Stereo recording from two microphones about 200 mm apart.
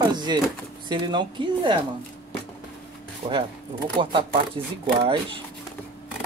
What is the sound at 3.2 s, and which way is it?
Speech, 30° right (ahead or behind).